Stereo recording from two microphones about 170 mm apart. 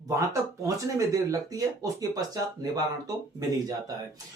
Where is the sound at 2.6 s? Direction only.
20° right (ahead or behind).